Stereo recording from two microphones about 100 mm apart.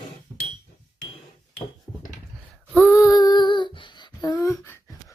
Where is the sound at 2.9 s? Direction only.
30° left (ahead or behind); by 4.3 s 55° left (ahead or behind).